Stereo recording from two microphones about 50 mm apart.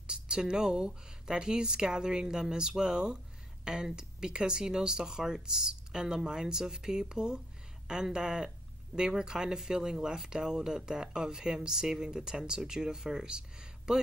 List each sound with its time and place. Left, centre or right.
0.0 s speech: centre